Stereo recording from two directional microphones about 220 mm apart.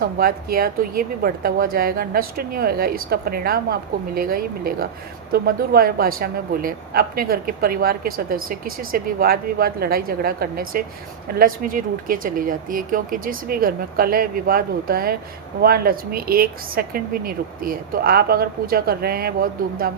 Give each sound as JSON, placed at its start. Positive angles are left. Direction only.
{"t": 0.0, "sound": "a woman's voice", "side_deg": -40}